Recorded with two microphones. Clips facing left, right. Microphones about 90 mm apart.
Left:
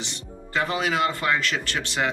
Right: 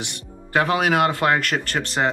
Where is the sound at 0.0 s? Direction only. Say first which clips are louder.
Right 2 dB; 60° right (ahead or behind).